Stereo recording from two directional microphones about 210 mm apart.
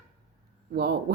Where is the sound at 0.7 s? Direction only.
50° right (ahead or behind).